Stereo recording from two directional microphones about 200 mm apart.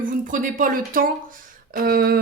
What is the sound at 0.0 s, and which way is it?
Speech, 40° right (ahead or behind).